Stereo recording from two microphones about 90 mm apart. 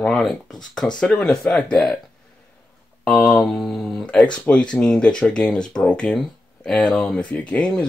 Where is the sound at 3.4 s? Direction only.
5° left (ahead or behind).